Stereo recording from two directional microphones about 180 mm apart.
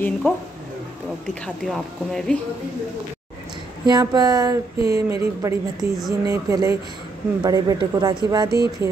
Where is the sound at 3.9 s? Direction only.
20° right (ahead or behind).